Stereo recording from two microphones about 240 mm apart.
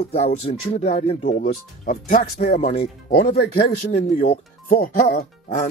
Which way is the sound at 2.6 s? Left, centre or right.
Left.